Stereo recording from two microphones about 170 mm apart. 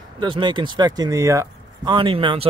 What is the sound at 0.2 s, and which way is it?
Speech, 25° right (ahead or behind).